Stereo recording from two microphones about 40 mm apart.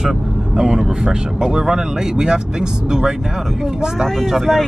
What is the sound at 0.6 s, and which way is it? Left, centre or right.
Speech, centre.